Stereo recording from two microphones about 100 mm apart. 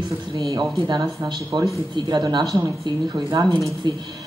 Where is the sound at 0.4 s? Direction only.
40° right (ahead or behind).